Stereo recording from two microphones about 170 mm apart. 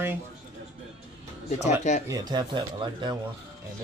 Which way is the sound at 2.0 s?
25° right (ahead or behind).